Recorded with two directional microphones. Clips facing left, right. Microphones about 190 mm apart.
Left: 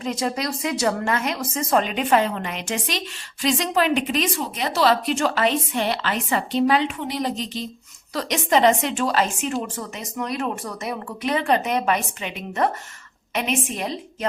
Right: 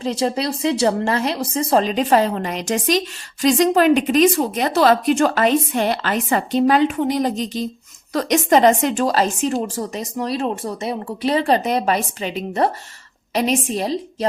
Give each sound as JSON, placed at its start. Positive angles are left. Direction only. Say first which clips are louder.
{"t": 0.0, "sound": "a woman's voice", "louder": "right 4 dB", "side_deg": -30}